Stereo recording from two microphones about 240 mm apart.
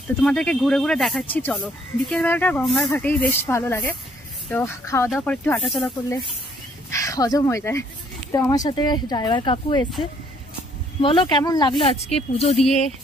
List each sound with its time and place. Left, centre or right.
0.2 s speech: centre
6.9 s speech: centre
11.0 s speech: left